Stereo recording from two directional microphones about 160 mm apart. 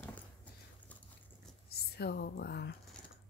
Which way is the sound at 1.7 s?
90° left.